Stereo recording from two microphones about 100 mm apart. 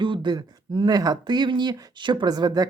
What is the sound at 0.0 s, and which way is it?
Speech, 55° right (ahead or behind).